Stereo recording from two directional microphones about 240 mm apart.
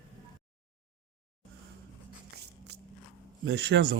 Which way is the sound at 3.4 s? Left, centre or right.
Right.